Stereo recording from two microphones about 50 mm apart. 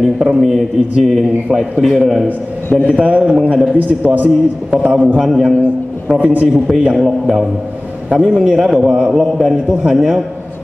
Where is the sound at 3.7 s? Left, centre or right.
Right.